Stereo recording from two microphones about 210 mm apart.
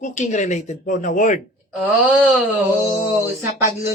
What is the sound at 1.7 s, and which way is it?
Speech, 5° right (ahead or behind).